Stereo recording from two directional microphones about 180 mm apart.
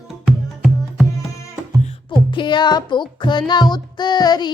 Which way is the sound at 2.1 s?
25° left (ahead or behind).